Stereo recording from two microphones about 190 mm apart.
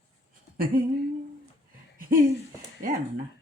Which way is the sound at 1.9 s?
50° right (ahead or behind).